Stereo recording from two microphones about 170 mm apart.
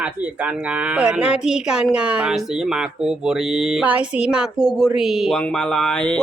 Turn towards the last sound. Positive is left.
turn(degrees=5)  # may be behind; listen again after turning